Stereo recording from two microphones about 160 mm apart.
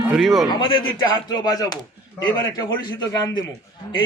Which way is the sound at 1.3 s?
25° left (ahead or behind).